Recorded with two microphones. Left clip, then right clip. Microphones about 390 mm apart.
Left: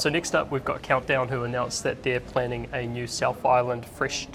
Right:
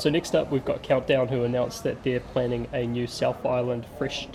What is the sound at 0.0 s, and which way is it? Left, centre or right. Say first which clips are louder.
Speech: right 1 dB; left.